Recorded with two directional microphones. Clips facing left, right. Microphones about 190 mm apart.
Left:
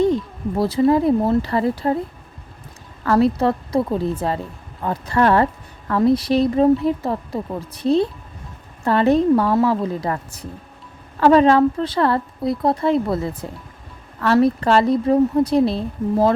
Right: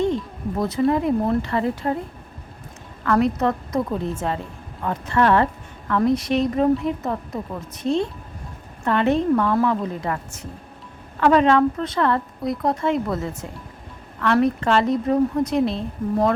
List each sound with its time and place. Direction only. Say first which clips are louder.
0.5 s a woman's voice: left 4 dB; 30° left (ahead or behind)
3.0 s a woman's voice: left 3 dB; 35° left (ahead or behind)